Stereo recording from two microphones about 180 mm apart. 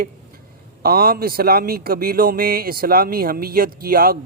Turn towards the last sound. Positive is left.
turn(degrees=-55)  # may be behind; listen again after turning